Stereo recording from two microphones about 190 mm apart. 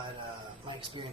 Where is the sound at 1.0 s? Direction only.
25° right (ahead or behind).